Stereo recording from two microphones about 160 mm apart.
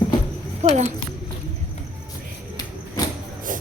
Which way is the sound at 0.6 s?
45° right (ahead or behind).